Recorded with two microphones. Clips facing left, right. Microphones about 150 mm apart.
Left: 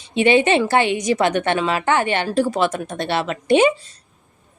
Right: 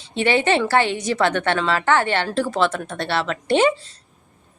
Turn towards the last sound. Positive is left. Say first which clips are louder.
# left 2 dB
turn(degrees=15)  # may be behind; listen again after turning